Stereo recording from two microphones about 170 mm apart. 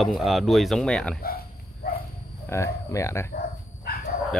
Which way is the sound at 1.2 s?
60° left (ahead or behind).